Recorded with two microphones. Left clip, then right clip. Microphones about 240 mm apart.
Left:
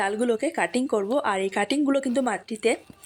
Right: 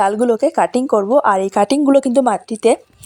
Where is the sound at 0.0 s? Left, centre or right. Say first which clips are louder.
Right 10 dB; right.